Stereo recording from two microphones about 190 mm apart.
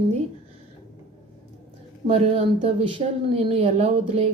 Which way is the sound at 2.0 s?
30° right (ahead or behind).